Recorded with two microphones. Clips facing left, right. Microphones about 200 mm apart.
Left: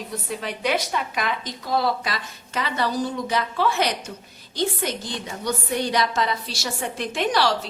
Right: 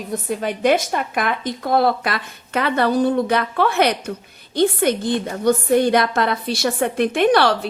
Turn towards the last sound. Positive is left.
turn(degrees=-60)  # may be behind; listen again after turning